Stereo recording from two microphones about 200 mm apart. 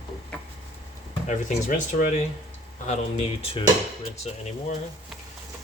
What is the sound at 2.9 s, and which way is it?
Speech, 30° left (ahead or behind).